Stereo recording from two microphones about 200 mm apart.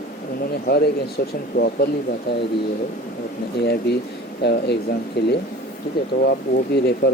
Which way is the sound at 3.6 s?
55° left (ahead or behind).